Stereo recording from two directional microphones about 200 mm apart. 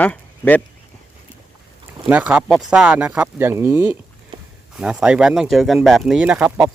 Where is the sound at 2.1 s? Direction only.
5° right (ahead or behind).